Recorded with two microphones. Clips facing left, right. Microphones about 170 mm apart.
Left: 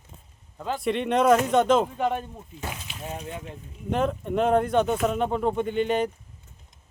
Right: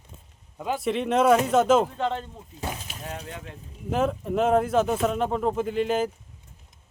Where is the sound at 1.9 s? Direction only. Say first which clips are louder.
Left 2 dB; 10° left (ahead or behind).